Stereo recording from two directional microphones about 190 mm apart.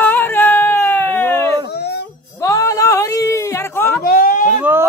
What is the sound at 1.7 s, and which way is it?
Music, 60° left (ahead or behind).